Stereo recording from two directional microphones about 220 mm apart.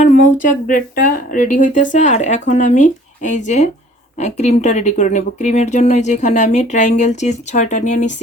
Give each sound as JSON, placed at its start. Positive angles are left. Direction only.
{"t": 0.0, "sound": "speech", "side_deg": 35}